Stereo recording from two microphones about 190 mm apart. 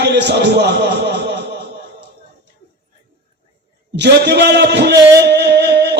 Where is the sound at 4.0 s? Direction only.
60° right (ahead or behind).